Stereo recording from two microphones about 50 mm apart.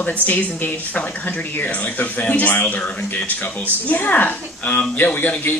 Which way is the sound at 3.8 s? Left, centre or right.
Left.